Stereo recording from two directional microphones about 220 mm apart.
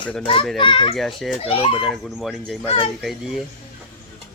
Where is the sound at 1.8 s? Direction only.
Centre (ahead or behind).